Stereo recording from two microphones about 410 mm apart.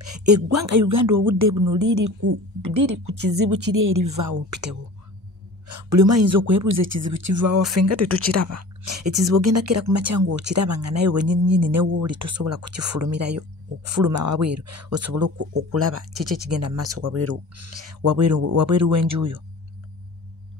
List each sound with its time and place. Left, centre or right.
0.2 s a woman's voice: right
5.8 s speech: right
11.4 s speech: right
11.7 s speech: right